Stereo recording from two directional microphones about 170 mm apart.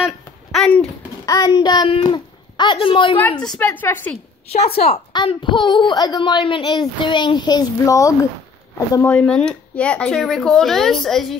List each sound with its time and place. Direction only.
0.0 s babbling: centre (ahead or behind)
1.2 s a child's voice: 20° left (ahead or behind)
3.2 s a woman's voice: 10° left (ahead or behind)
4.6 s a child's voice: 35° left (ahead or behind); by 11.3 s centre (ahead or behind)